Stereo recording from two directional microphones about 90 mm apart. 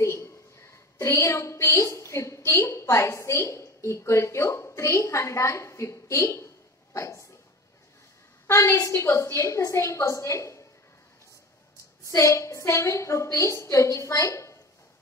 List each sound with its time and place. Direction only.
0.0 s a woman's voice: 30° left (ahead or behind)
8.5 s a woman's voice: 30° left (ahead or behind)
12.0 s a woman's voice: 35° left (ahead or behind)